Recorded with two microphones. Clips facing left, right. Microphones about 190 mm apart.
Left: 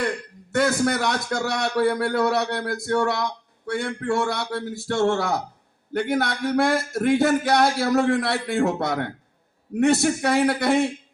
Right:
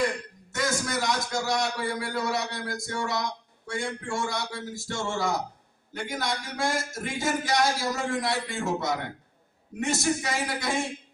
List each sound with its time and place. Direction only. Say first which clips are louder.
0.5 s a man's voice: left 8 dB; 60° left (ahead or behind)